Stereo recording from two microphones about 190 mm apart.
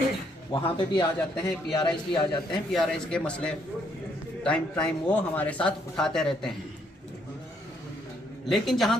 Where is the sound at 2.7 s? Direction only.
Centre (ahead or behind).